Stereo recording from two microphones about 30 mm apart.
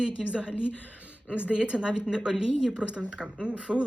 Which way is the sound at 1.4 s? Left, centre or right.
Right.